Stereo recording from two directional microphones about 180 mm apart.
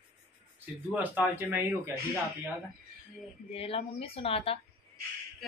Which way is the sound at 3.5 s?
30° left (ahead or behind).